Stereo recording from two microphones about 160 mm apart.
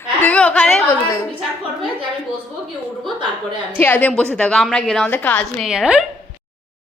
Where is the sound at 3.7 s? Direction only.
10° left (ahead or behind).